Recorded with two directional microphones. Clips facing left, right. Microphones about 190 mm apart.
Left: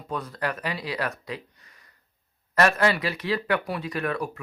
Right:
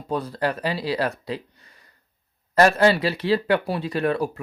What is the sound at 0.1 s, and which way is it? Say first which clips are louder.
Speech: right 5 dB; 30° right (ahead or behind).